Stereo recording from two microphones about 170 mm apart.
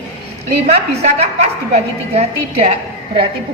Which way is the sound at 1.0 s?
40° right (ahead or behind).